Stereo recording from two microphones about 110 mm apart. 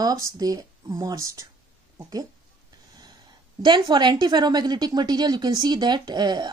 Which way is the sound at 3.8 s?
40° right (ahead or behind).